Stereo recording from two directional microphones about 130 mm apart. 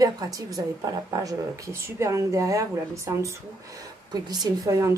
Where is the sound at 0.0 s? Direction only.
30° right (ahead or behind).